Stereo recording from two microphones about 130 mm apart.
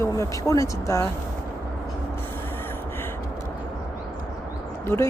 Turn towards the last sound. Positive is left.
turn(degrees=20)  # may be behind; listen again after turning